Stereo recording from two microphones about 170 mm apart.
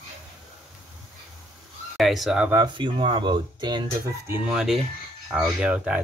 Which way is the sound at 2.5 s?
25° right (ahead or behind).